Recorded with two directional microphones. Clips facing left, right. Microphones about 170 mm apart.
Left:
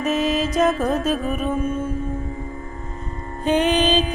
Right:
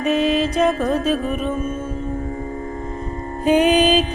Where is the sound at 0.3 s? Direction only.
45° left (ahead or behind).